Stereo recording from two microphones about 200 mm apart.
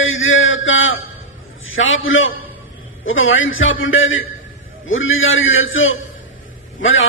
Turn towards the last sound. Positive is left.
turn(degrees=75)  # may be behind; listen again after turning